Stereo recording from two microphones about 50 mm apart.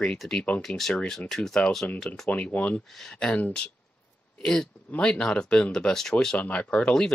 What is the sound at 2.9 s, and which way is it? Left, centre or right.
Speech, centre.